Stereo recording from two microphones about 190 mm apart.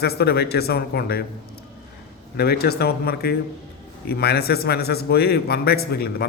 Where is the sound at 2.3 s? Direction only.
55° left (ahead or behind).